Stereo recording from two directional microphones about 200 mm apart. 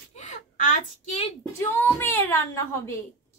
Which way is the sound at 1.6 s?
10° left (ahead or behind).